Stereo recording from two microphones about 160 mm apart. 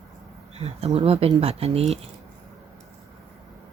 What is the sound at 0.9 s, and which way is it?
Speech, 40° right (ahead or behind).